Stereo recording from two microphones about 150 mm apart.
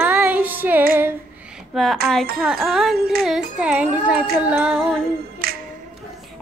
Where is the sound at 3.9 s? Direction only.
10° right (ahead or behind).